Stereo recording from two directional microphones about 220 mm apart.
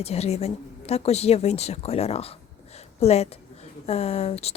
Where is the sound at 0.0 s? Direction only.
30° left (ahead or behind).